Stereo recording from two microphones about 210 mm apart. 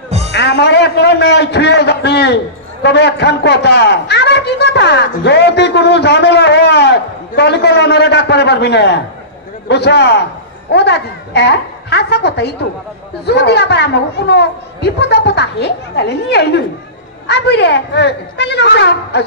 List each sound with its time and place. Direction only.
0.3 s a man's voice: 55° left (ahead or behind)